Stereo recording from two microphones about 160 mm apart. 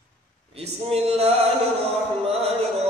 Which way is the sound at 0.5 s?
40° right (ahead or behind).